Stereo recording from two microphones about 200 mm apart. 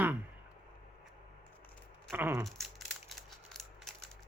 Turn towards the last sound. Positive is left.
turn(degrees=0)  # may be behind; listen again after turning